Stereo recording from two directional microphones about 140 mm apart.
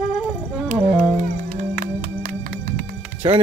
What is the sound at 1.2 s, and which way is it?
Music, 80° right.